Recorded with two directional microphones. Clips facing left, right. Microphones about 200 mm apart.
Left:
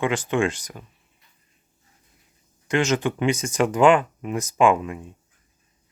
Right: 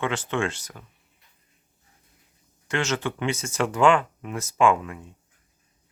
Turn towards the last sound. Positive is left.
turn(degrees=20)  # may be behind; listen again after turning